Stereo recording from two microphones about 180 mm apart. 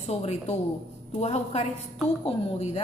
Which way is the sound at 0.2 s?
35° left (ahead or behind).